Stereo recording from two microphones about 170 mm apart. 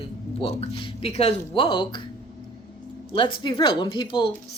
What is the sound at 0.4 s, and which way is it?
Speech, 30° left (ahead or behind).